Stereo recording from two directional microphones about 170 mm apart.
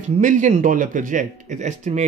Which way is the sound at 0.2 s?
50° right (ahead or behind).